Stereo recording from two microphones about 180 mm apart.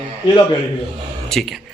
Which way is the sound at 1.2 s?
Centre (ahead or behind).